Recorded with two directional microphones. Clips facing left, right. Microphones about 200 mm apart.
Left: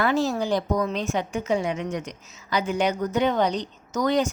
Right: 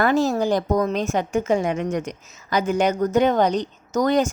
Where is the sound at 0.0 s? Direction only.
50° right (ahead or behind).